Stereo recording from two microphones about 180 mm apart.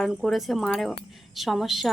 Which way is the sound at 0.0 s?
Centre (ahead or behind).